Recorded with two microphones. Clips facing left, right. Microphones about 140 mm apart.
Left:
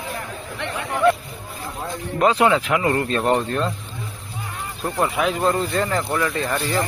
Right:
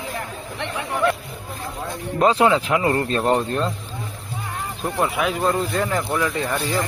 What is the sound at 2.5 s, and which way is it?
Speech, 25° right (ahead or behind).